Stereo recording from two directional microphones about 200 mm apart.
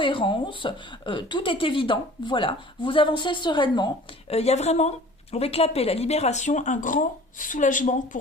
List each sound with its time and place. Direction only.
0.0 s a woman's voice: 25° left (ahead or behind); by 8.2 s 40° left (ahead or behind)